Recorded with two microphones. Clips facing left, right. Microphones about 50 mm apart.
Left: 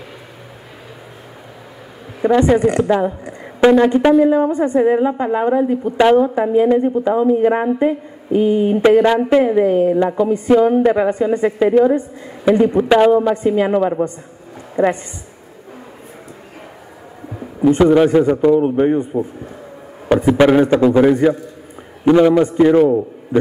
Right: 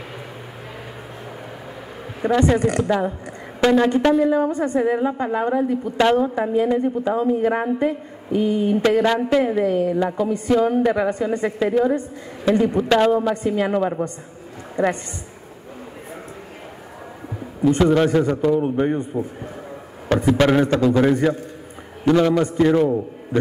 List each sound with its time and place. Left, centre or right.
2.2 s a woman's voice: centre
9.0 s a woman's voice: centre
9.8 s a woman's voice: left
12.4 s a woman's voice: left
17.6 s a man's voice: centre